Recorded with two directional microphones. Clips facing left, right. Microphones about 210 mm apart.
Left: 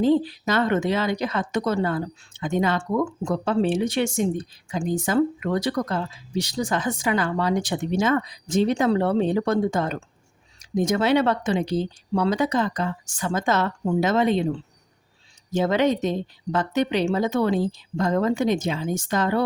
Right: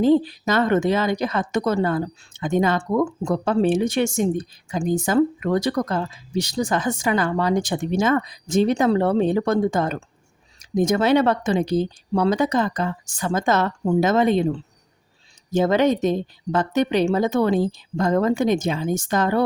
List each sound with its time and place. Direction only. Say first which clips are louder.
0.0 s speech: right 3 dB; 45° right (ahead or behind)
15.5 s speech: right 3 dB; 45° right (ahead or behind)